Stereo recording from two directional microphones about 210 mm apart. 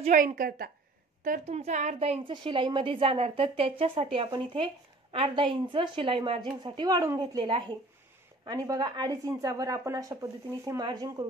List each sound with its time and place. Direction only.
0.0 s a woman's voice: 35° right (ahead or behind); by 11.2 s 15° right (ahead or behind)